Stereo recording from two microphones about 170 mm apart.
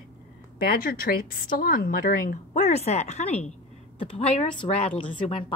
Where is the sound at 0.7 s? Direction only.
60° left (ahead or behind); by 3.5 s 40° left (ahead or behind).